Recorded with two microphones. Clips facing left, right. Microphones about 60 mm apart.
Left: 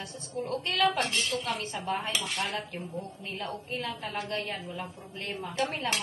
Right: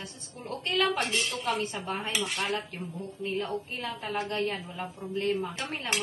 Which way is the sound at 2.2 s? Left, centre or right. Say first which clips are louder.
Right 2 dB; centre.